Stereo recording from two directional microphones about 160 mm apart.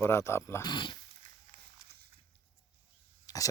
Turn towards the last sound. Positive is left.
turn(degrees=25)  # may be behind; listen again after turning